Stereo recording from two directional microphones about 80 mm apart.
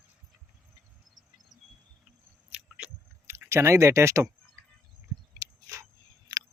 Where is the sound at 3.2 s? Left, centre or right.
Right.